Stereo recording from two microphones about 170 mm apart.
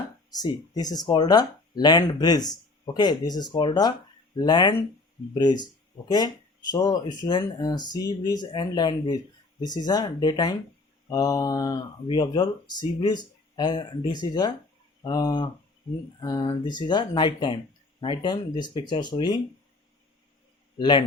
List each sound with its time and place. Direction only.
0.3 s speech: 20° left (ahead or behind)
20.7 s speech: 25° left (ahead or behind)